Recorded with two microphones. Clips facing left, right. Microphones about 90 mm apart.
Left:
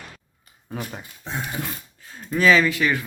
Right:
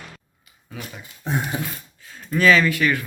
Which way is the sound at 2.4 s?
10° left (ahead or behind).